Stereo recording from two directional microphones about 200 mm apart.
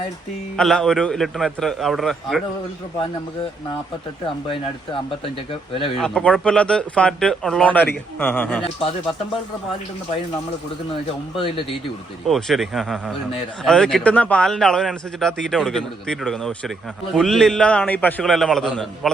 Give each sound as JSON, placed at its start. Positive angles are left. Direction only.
{"t": 0.5, "sound": "a man's voice", "side_deg": 0}
{"t": 5.2, "sound": "speech", "side_deg": 25}
{"t": 6.0, "sound": "a man's voice", "side_deg": 5}
{"t": 8.6, "sound": "speech", "side_deg": 25}
{"t": 11.3, "sound": "speech", "side_deg": 25}
{"t": 12.3, "sound": "a man's voice", "side_deg": 0}